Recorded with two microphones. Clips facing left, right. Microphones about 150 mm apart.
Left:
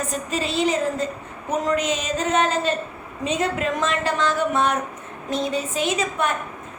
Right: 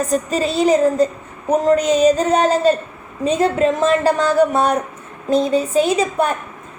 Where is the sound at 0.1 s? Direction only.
40° right (ahead or behind).